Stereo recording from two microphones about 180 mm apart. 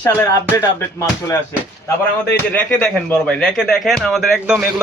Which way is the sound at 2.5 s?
5° left (ahead or behind).